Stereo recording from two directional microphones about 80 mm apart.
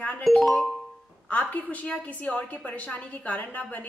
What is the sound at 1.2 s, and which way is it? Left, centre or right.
A woman's voice, centre.